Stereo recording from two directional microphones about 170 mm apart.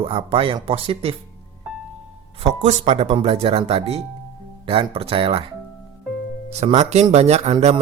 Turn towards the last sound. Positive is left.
turn(degrees=-40)  # may be behind; listen again after turning